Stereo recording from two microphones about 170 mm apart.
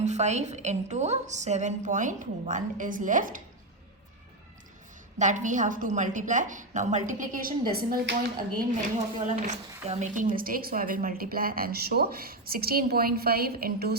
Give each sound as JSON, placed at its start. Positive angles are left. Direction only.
{"t": 0.0, "sound": "a woman's voice", "side_deg": -40}
{"t": 5.1, "sound": "a woman's voice", "side_deg": -45}
{"t": 8.7, "sound": "a woman's voice", "side_deg": -45}
{"t": 10.3, "sound": "a woman's voice", "side_deg": -55}